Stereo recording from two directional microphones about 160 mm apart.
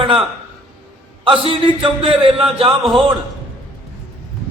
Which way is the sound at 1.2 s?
35° right (ahead or behind).